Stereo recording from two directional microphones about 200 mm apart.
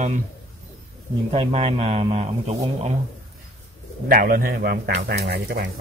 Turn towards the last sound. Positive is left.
turn(degrees=-55)  # may be behind; listen again after turning